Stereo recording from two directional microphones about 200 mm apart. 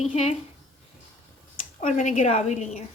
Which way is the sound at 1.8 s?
35° left (ahead or behind).